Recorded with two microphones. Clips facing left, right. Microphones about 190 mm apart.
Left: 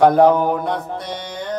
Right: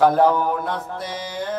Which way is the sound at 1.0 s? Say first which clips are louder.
Even; 5° right (ahead or behind).